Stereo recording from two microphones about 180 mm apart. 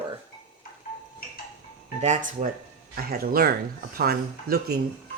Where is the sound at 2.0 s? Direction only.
40° right (ahead or behind).